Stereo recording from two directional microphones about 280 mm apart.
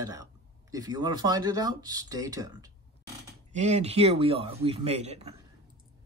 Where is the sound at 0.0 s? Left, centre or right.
Centre.